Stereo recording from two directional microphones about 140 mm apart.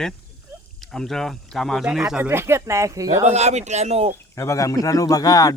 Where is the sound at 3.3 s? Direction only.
55° right (ahead or behind).